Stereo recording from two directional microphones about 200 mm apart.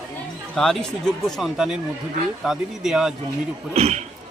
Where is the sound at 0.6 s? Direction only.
Centre (ahead or behind).